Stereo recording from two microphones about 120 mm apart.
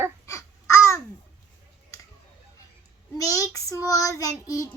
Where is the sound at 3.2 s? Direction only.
30° left (ahead or behind).